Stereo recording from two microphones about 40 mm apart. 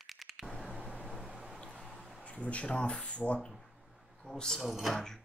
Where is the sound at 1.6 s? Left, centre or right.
Centre.